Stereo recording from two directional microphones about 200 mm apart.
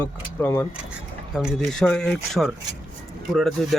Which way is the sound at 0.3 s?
15° left (ahead or behind).